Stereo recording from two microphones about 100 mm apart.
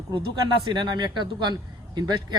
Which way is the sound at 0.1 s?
55° right (ahead or behind).